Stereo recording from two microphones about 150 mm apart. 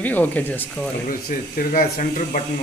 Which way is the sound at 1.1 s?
75° left (ahead or behind).